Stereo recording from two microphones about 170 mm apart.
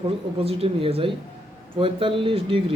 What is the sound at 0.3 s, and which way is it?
Speech, 35° right (ahead or behind).